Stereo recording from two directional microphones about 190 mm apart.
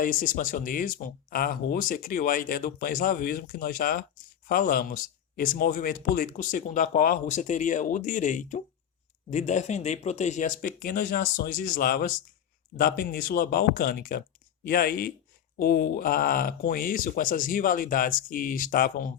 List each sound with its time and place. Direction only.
0.0 s speech: 45° left (ahead or behind)